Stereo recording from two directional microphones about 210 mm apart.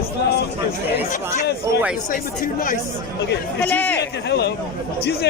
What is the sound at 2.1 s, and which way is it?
Speech, 40° left (ahead or behind).